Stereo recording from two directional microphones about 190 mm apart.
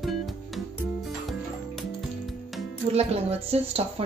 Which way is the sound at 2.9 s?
35° right (ahead or behind).